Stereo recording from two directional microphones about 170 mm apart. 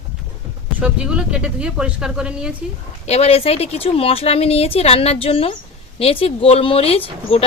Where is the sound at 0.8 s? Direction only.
5° right (ahead or behind).